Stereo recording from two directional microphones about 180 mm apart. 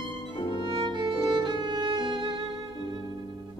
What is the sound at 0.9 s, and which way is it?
Music, 25° right (ahead or behind).